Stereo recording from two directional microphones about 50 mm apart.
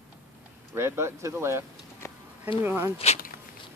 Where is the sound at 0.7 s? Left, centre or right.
Right.